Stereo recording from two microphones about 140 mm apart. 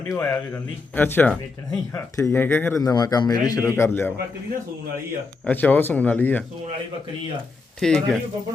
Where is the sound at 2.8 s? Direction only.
25° left (ahead or behind).